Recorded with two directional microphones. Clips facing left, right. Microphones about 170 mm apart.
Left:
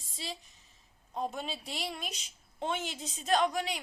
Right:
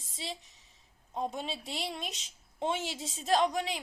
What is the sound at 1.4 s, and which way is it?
Speech, centre (ahead or behind).